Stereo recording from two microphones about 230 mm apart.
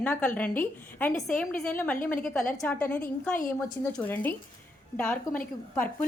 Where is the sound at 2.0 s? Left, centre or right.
Left.